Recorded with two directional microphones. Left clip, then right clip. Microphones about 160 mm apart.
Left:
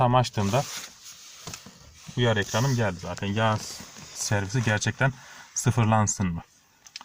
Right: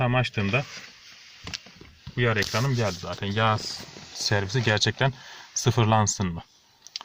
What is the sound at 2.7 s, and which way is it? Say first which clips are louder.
Speech: even; 5° left (ahead or behind).